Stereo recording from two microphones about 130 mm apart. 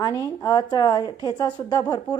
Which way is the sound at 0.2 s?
30° left (ahead or behind).